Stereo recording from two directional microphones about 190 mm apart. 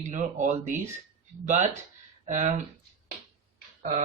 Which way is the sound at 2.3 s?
40° right (ahead or behind).